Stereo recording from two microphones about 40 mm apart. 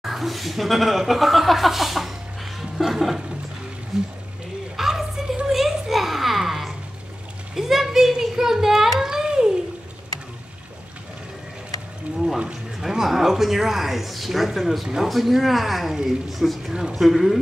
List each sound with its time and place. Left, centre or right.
0.0 s speech: centre
2.8 s music: centre
3.9 s speech: centre
4.7 s a sound: centre
12.7 s a sound: centre
15.0 s speech: centre